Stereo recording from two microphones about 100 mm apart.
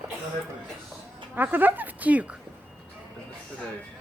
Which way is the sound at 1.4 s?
20° right (ahead or behind).